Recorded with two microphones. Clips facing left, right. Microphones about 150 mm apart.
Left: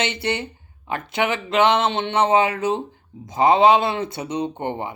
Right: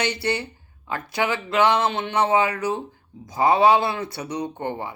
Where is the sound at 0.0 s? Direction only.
20° left (ahead or behind).